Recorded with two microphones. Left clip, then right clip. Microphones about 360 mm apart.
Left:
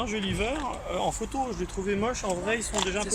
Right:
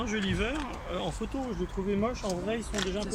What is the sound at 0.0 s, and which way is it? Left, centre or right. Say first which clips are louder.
Speech: left 2 dB; centre.